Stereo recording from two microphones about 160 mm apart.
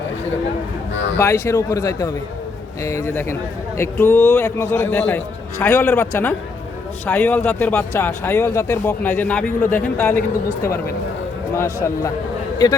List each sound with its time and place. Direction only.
1.2 s a man's voice: 20° left (ahead or behind)
11.5 s a man's voice: 20° left (ahead or behind)